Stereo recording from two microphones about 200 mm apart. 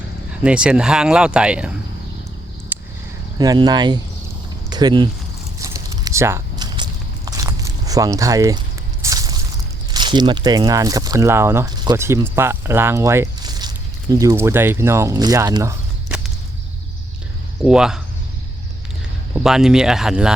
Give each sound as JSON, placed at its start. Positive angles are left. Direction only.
{"t": 0.4, "sound": "speech", "side_deg": -5}
{"t": 2.7, "sound": "a sound", "side_deg": -10}
{"t": 3.3, "sound": "speech", "side_deg": -20}
{"t": 5.5, "sound": "biting", "side_deg": -15}
{"t": 9.9, "sound": "speech", "side_deg": -20}
{"t": 16.0, "sound": "walk", "side_deg": -5}
{"t": 17.6, "sound": "speech", "side_deg": -5}
{"t": 19.3, "sound": "speech", "side_deg": -5}